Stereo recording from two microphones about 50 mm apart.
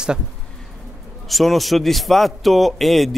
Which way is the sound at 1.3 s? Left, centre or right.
Centre.